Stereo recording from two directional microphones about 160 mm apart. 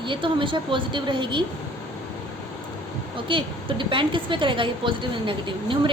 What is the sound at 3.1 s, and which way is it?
A woman's voice, 30° right (ahead or behind).